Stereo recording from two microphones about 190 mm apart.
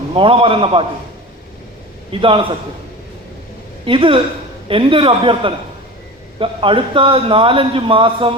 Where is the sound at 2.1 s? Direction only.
25° right (ahead or behind).